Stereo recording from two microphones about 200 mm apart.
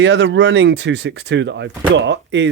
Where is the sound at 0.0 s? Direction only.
65° right (ahead or behind).